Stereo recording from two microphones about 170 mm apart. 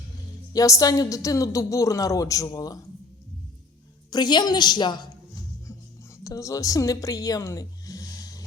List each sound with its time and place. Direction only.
0.5 s a woman's voice: 20° left (ahead or behind)
4.1 s a woman's voice: 25° left (ahead or behind)
6.2 s speech: 20° left (ahead or behind)